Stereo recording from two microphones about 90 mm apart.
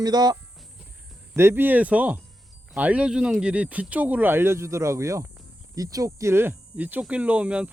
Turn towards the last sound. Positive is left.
turn(degrees=-15)  # may be behind; listen again after turning